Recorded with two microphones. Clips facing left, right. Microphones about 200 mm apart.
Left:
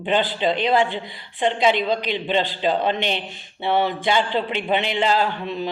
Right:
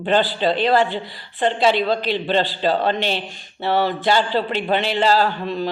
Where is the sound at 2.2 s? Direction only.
40° right (ahead or behind).